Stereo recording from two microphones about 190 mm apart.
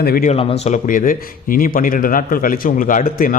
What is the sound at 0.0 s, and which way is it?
Speech, 55° left (ahead or behind).